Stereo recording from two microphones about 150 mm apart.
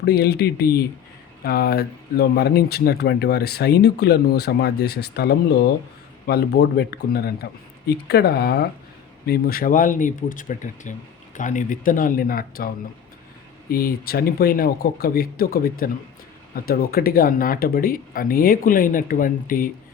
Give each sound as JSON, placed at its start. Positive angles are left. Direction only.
{"t": 0.0, "sound": "speech", "side_deg": 90}